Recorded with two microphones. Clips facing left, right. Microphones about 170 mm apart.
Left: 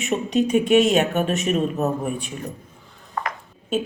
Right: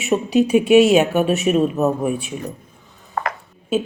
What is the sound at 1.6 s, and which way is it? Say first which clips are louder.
Speech: right 5 dB; 45° right (ahead or behind).